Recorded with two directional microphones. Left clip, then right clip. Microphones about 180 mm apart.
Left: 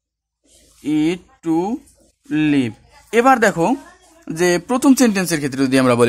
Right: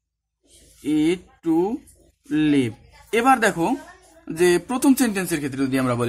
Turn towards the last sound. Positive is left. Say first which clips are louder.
# left 8 dB
turn(degrees=40)  # may be behind; listen again after turning